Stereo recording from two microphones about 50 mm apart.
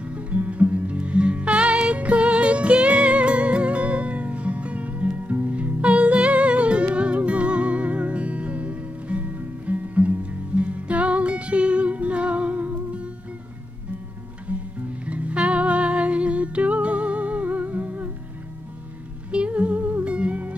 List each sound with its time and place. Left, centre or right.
0.0 s music: right
14.5 s music: right
19.3 s music: right